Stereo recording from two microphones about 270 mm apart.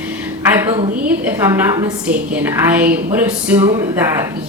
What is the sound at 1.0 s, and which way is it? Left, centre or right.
A woman's voice, centre.